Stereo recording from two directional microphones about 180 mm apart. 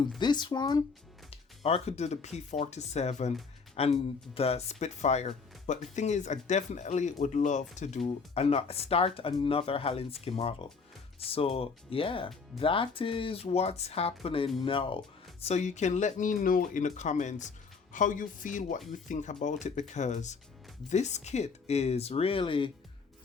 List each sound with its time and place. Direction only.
0.2 s speech: 25° left (ahead or behind)
1.3 s speech: 35° left (ahead or behind)